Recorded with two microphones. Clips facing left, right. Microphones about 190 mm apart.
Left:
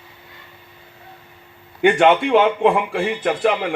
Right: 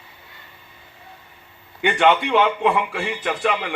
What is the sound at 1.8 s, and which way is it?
A man's voice, 45° left (ahead or behind).